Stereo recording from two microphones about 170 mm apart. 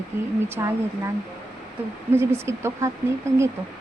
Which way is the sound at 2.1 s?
15° right (ahead or behind).